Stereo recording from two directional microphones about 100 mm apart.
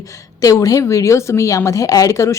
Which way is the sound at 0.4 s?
35° left (ahead or behind).